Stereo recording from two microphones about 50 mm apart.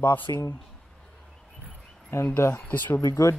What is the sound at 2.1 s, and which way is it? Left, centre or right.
Speech, left.